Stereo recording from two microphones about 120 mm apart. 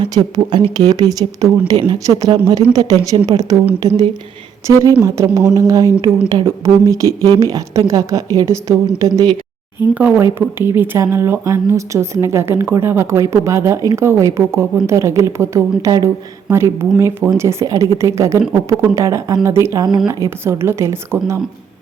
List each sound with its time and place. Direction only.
0.0 s speech: 35° right (ahead or behind)
4.6 s speech: 25° right (ahead or behind)
9.9 s speech: 15° right (ahead or behind)